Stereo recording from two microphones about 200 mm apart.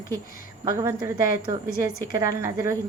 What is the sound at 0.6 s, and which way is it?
A woman's voice, 15° right (ahead or behind).